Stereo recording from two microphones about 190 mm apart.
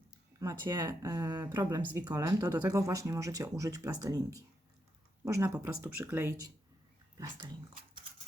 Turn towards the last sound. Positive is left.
turn(degrees=-20)  # may be behind; listen again after turning